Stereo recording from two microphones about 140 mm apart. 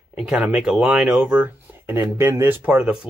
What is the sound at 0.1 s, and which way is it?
Speech, 10° right (ahead or behind).